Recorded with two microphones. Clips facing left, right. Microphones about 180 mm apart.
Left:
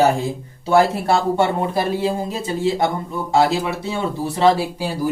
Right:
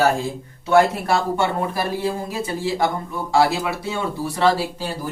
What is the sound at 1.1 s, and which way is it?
Speech, 25° left (ahead or behind).